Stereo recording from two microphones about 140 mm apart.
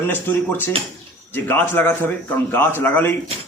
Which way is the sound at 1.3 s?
15° left (ahead or behind).